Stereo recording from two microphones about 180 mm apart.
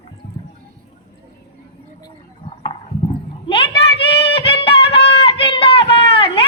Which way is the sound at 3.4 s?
30° left (ahead or behind).